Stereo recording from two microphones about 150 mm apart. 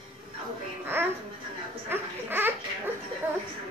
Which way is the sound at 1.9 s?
15° right (ahead or behind).